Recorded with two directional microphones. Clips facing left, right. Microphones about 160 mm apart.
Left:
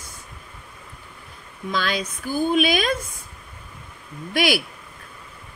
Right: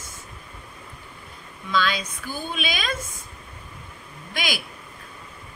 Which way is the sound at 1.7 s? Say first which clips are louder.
Right 1 dB; 50° left (ahead or behind).